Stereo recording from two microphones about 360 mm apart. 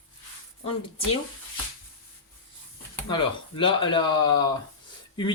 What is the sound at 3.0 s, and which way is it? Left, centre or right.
Speech, centre.